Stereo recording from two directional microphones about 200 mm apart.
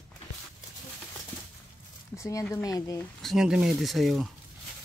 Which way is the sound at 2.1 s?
15° left (ahead or behind).